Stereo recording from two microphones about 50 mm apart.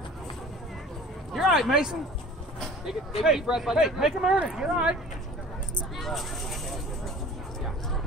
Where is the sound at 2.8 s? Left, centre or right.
Centre.